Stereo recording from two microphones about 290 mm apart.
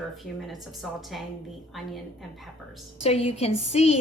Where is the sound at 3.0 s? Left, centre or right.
Centre.